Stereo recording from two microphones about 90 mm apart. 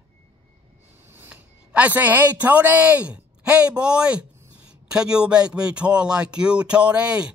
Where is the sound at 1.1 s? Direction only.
20° right (ahead or behind).